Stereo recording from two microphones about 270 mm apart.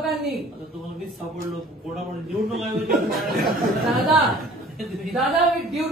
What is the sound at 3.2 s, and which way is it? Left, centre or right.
Speech, right.